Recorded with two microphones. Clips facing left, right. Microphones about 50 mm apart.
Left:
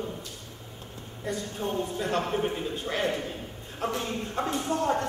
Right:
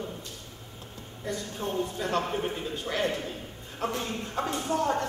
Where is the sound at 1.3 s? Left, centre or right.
Centre.